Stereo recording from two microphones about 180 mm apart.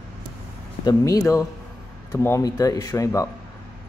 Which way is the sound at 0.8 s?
20° left (ahead or behind).